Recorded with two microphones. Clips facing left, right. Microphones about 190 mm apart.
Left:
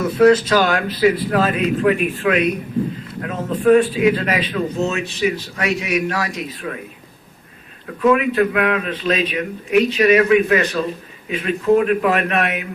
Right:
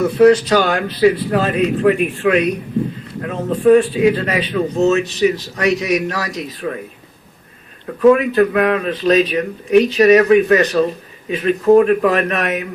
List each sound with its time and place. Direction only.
0.0 s a man's voice: 30° right (ahead or behind)
8.1 s a man's voice: 35° right (ahead or behind)